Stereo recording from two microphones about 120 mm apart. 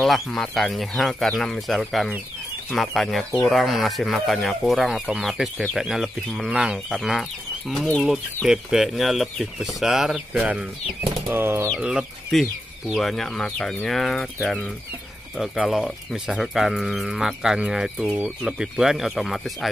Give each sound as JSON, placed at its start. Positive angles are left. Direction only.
{"t": 0.0, "sound": "speech", "side_deg": 0}
{"t": 11.8, "sound": "speech", "side_deg": -5}